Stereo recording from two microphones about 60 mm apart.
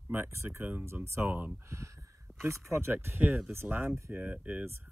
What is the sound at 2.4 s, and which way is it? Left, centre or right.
Speech, right.